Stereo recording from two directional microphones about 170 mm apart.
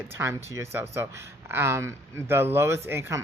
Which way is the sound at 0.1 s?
15° right (ahead or behind).